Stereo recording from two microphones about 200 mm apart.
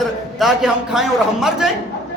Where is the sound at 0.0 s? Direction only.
Centre (ahead or behind).